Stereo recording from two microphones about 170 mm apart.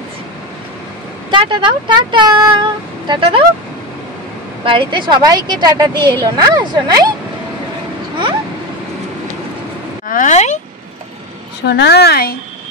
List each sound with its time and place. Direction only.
1.3 s speech: 30° right (ahead or behind)
4.6 s speech: 30° right (ahead or behind)
10.0 s speech: 50° left (ahead or behind)
11.6 s a woman's voice: 85° left; by 12.4 s 65° left (ahead or behind)